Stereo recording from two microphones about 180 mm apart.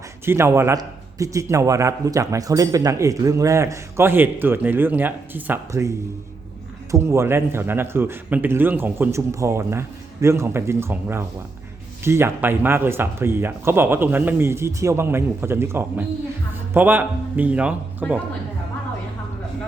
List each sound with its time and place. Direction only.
0.3 s a man's voice: 15° right (ahead or behind)
6.9 s a man's voice: 15° right (ahead or behind)